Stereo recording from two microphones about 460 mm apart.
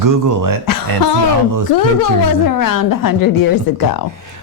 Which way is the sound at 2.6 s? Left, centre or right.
Left.